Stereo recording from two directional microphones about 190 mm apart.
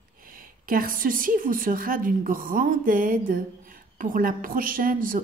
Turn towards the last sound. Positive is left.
turn(degrees=-45)  # may be behind; listen again after turning